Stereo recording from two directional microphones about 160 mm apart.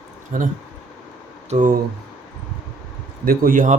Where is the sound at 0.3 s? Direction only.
55° right (ahead or behind).